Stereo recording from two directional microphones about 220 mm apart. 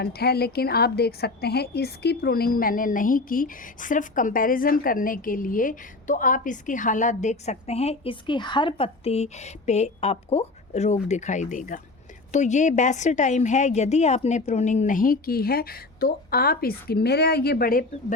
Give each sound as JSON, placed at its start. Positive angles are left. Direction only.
{"t": 0.0, "sound": "a woman's voice", "side_deg": 45}